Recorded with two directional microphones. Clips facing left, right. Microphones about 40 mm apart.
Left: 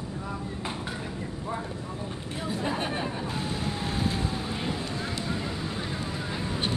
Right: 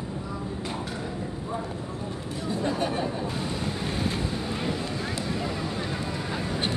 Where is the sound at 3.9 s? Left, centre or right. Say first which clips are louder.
Right 1 dB; centre.